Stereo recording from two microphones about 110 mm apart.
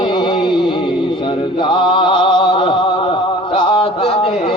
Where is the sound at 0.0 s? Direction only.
40° left (ahead or behind).